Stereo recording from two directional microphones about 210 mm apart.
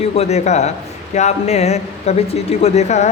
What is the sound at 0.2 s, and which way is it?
A man's voice, 30° left (ahead or behind).